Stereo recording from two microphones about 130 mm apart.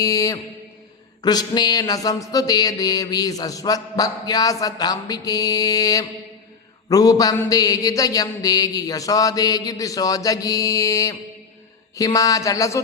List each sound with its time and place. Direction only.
0.0 s mantra: 25° left (ahead or behind)